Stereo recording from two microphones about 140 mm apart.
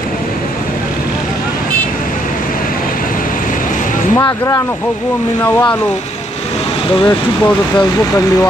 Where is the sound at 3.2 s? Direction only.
75° left (ahead or behind).